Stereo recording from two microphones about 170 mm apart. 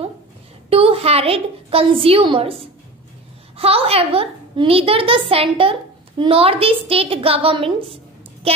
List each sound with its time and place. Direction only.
0.7 s a child's voice: 35° right (ahead or behind)